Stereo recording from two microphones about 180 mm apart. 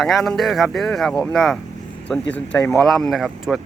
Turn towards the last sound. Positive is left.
turn(degrees=0)  # may be behind; listen again after turning